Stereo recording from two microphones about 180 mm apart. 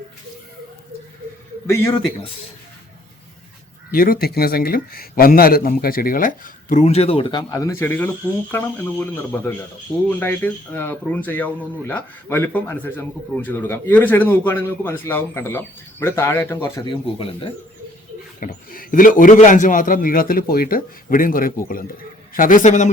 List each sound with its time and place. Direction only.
1.6 s speech: 15° left (ahead or behind)
3.9 s a man's voice: 55° left (ahead or behind); by 16.8 s 15° left (ahead or behind)
16.8 s speech: 30° left (ahead or behind)
18.3 s a man's voice: 50° left (ahead or behind)